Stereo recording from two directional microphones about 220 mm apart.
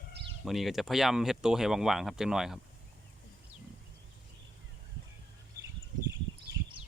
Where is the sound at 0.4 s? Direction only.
Centre (ahead or behind).